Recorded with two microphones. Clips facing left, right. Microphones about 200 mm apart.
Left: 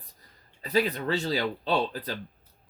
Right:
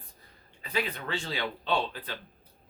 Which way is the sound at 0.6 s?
40° left (ahead or behind).